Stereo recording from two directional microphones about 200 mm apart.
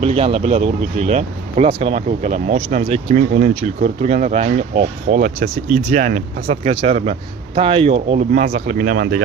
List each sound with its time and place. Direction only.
0.0 s speech: 30° right (ahead or behind)
8.3 s speech: 45° right (ahead or behind)